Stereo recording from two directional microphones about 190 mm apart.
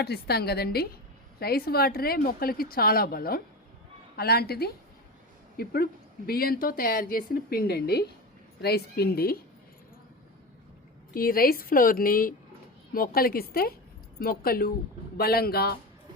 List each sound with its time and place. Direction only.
0.0 s a woman's voice: 55° left (ahead or behind)
11.1 s a woman's voice: 50° left (ahead or behind)